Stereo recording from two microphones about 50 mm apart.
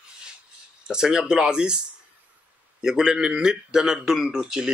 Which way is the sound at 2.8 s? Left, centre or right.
Centre.